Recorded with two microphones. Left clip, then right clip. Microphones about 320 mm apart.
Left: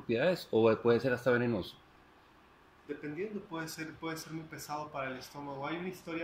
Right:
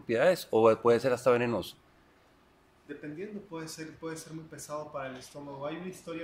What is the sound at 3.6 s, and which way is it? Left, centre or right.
Speech, centre.